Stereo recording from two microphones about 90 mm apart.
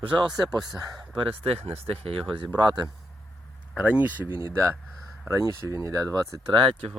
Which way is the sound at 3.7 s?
15° right (ahead or behind).